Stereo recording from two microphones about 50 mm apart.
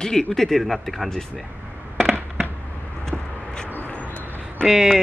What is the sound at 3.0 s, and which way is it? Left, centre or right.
Vehicle, centre.